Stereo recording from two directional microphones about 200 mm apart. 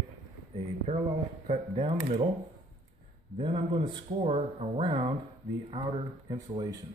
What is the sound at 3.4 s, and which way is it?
Speech, 25° right (ahead or behind).